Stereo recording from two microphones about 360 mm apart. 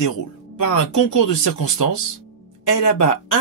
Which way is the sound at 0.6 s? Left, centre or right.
Left.